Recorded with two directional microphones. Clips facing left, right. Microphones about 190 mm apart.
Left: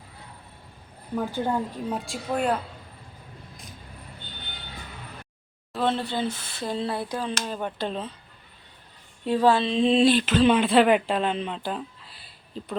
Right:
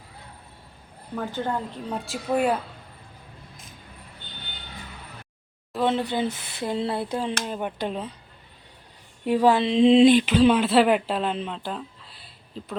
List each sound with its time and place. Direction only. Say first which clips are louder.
1.1 s a woman's voice: left 2 dB; 10° left (ahead or behind)
2.0 s speech: right 4 dB; 5° right (ahead or behind)
5.8 s speech: right 2 dB; 15° right (ahead or behind)
9.2 s speech: right 1 dB; 15° right (ahead or behind)